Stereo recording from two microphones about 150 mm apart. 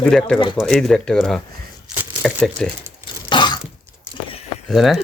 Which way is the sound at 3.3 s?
30° left (ahead or behind).